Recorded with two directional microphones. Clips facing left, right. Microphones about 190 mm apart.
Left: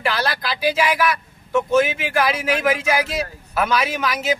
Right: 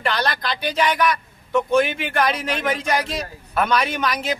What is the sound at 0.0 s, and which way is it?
Speech, 5° left (ahead or behind).